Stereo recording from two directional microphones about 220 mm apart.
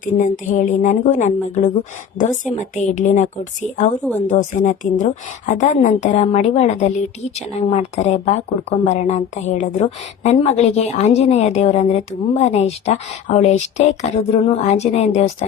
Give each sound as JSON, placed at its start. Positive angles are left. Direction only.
{"t": 0.0, "sound": "a woman's voice", "side_deg": 35}